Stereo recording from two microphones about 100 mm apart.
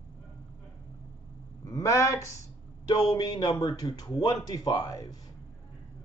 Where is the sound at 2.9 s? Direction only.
40° left (ahead or behind).